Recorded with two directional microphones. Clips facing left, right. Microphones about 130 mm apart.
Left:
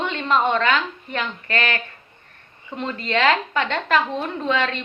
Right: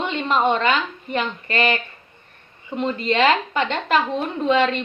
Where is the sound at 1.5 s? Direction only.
10° right (ahead or behind).